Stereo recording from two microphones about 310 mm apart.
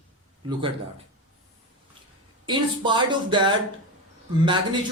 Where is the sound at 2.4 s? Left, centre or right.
Centre.